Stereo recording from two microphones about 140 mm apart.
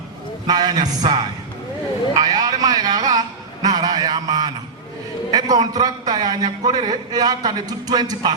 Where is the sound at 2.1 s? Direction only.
25° right (ahead or behind).